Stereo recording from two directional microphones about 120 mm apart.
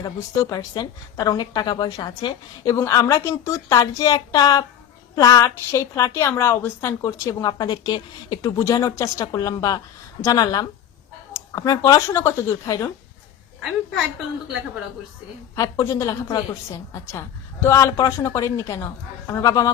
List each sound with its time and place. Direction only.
0.0 s a woman's voice: 35° left (ahead or behind)
15.5 s a woman's voice: 30° left (ahead or behind)